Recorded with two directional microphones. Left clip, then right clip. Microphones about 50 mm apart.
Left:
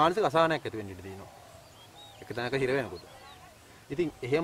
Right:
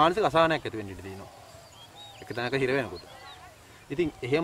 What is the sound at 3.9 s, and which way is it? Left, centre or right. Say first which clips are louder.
Speech: right 2 dB; centre.